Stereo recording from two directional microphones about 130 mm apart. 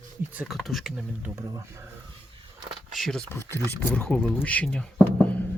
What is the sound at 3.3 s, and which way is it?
Speech, 20° left (ahead or behind).